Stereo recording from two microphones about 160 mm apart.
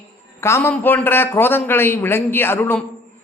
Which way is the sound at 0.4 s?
15° left (ahead or behind).